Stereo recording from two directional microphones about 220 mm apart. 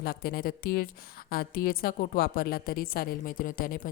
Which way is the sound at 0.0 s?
45° left (ahead or behind).